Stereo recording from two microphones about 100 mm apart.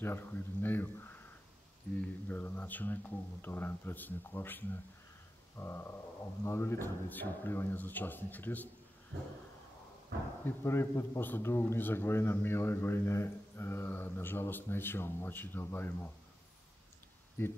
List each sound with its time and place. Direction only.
0.0 s a man's voice: 20° left (ahead or behind)
2.2 s a man's voice: 20° left (ahead or behind)
10.4 s a man's voice: 25° left (ahead or behind)
17.4 s a man's voice: 25° left (ahead or behind)